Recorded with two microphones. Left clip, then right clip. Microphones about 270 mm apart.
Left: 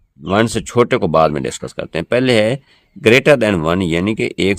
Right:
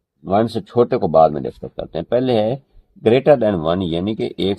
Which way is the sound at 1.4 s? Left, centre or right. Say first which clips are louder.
Left 3 dB; left.